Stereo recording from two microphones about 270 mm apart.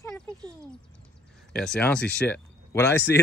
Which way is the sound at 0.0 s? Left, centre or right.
Centre.